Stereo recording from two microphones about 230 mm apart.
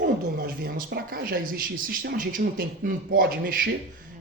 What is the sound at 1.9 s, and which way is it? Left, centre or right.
A man's voice, right.